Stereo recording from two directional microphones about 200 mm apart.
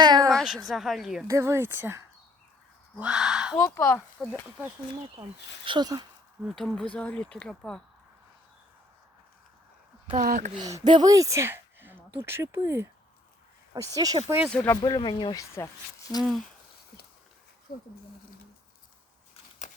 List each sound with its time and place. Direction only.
0.0 s a sound: 20° right (ahead or behind)
0.3 s a sound: centre (ahead or behind)
0.7 s speech: centre (ahead or behind)
1.3 s speech: 15° right (ahead or behind)
3.0 s speech: 5° right (ahead or behind)
3.5 s speech: 15° left (ahead or behind)
5.6 s speech: 20° right (ahead or behind)
6.4 s speech: centre (ahead or behind)
10.1 s speech: 40° right (ahead or behind); by 12.9 s 10° right (ahead or behind)
13.9 s speech: 20° right (ahead or behind)
14.5 s speech: 10° left (ahead or behind)
14.8 s speech: 20° left (ahead or behind)
16.1 s speech: 5° right (ahead or behind)